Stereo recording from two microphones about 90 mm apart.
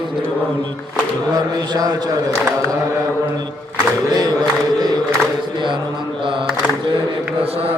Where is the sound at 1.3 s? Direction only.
50° right (ahead or behind).